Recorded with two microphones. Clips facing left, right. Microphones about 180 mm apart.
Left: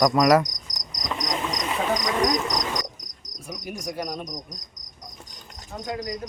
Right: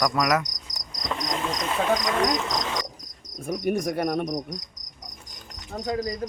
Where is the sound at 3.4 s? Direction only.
60° right (ahead or behind).